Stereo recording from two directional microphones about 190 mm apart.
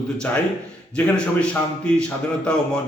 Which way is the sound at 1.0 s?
5° left (ahead or behind).